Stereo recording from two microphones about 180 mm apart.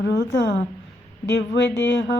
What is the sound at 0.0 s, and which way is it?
Speech, 70° left (ahead or behind).